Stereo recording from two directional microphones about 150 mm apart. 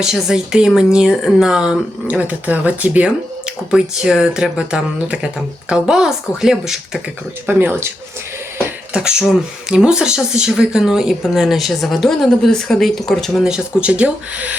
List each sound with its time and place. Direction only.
0.0 s speech: 5° right (ahead or behind)
7.4 s speech: 15° right (ahead or behind)
8.9 s speech: 5° right (ahead or behind)